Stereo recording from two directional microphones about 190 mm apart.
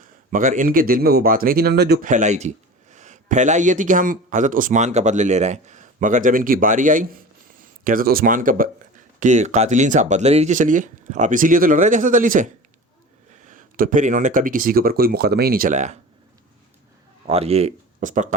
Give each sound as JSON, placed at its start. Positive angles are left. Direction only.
{"t": 0.0, "sound": "speech", "side_deg": -45}
{"t": 17.2, "sound": "speech", "side_deg": -30}